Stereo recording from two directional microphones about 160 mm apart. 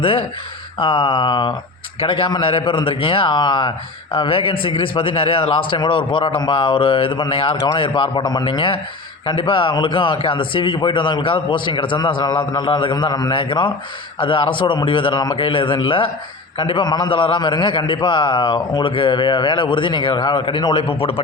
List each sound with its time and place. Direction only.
0.0 s a man's voice: 35° left (ahead or behind)